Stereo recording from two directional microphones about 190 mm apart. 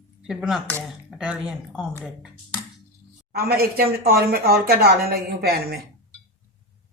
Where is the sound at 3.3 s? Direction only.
50° right (ahead or behind).